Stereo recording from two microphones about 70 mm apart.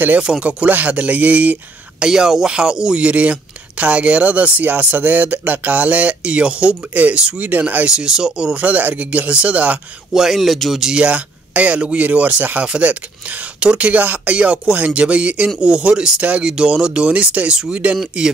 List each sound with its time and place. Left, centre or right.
0.2 s speech: centre
2.0 s speech: centre
10.1 s speech: centre
11.0 s speech: centre